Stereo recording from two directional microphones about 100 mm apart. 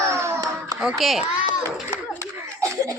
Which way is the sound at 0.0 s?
30° right (ahead or behind).